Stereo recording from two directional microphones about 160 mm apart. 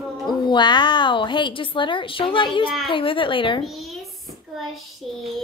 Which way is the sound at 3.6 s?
Centre (ahead or behind).